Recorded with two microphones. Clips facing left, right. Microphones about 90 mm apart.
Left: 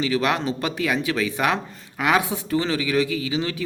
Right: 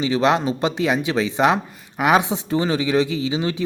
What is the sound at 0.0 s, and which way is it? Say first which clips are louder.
Speech: right 4 dB; 20° right (ahead or behind).